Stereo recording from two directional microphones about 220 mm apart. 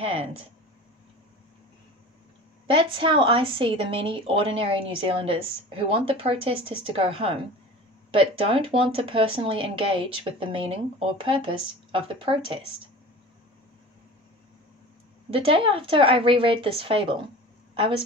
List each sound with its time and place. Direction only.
0.0 s a woman's voice: 25° right (ahead or behind)
2.6 s a woman's voice: 25° right (ahead or behind)
15.3 s a woman's voice: 25° right (ahead or behind)